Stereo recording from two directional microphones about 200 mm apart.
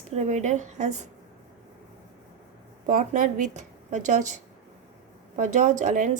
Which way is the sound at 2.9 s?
40° right (ahead or behind).